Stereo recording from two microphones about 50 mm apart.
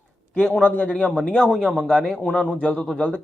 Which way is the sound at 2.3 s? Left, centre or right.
Left.